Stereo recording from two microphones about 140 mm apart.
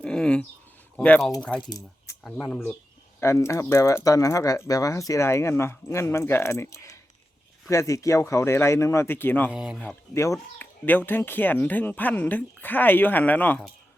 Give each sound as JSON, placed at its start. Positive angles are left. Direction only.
{"t": 0.0, "sound": "a sound", "side_deg": 5}
{"t": 0.9, "sound": "speech", "side_deg": 10}
{"t": 1.6, "sound": "speech", "side_deg": 25}
{"t": 2.2, "sound": "speech", "side_deg": 10}
{"t": 3.2, "sound": "speech", "side_deg": 20}
{"t": 9.5, "sound": "speech", "side_deg": -5}
{"t": 10.6, "sound": "speech", "side_deg": 15}